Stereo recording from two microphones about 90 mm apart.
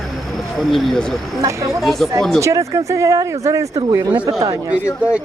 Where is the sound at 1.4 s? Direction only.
40° right (ahead or behind).